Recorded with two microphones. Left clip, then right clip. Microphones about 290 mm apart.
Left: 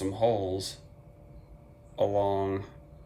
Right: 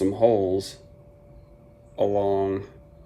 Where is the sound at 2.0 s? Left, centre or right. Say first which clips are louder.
Right 4 dB; centre.